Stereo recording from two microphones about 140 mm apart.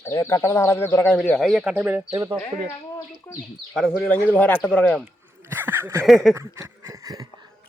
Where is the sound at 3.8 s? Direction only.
10° left (ahead or behind).